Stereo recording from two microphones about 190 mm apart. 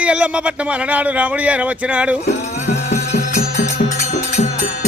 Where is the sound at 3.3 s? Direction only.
45° left (ahead or behind).